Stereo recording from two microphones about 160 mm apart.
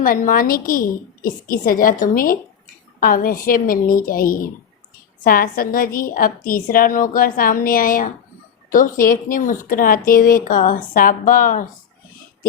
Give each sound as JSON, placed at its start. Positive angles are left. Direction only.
{"t": 0.0, "sound": "speech", "side_deg": 60}